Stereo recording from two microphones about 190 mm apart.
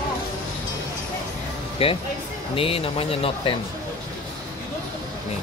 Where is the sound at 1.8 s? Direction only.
30° left (ahead or behind).